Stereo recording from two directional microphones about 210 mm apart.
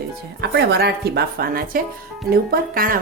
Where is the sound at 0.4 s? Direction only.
50° right (ahead or behind).